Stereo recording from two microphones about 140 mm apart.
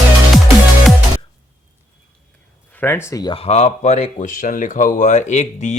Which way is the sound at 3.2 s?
40° left (ahead or behind).